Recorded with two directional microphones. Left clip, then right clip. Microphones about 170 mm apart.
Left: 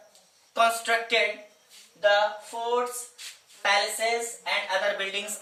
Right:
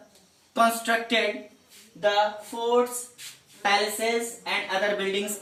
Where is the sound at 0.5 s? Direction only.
Centre (ahead or behind).